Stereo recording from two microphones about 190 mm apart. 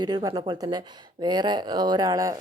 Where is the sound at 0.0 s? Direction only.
20° right (ahead or behind).